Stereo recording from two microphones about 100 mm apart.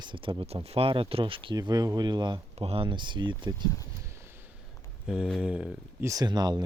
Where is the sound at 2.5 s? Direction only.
75° right (ahead or behind).